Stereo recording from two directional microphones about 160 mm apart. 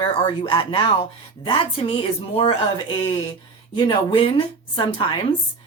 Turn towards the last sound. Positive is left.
turn(degrees=30)  # may be behind; listen again after turning